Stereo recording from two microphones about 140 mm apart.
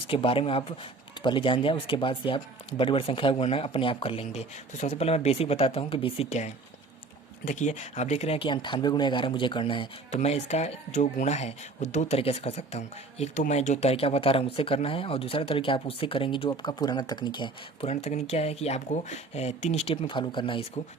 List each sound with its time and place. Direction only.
0.1 s speech: 40° left (ahead or behind)
7.4 s speech: 60° left (ahead or behind); by 10.2 s 40° left (ahead or behind)
10.2 s speech: 55° left (ahead or behind); by 17.8 s 35° left (ahead or behind)
17.8 s speech: 50° left (ahead or behind)